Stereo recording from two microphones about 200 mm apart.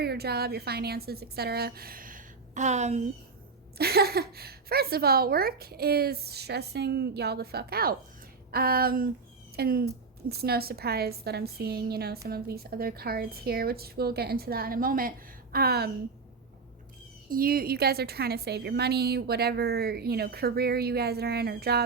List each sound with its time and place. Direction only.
0.0 s a woman's voice: 50° right (ahead or behind); by 3.1 s 35° right (ahead or behind)
3.8 s a woman's voice: 50° right (ahead or behind)
17.3 s a woman's voice: 45° right (ahead or behind)